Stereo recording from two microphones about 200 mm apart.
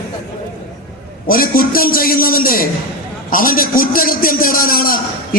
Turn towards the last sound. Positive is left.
turn(degrees=45)  # may be behind; listen again after turning